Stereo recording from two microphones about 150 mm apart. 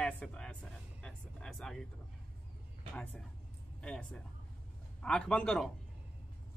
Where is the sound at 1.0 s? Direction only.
5° left (ahead or behind).